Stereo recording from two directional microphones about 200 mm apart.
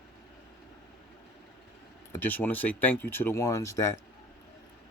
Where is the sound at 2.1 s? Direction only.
10° left (ahead or behind).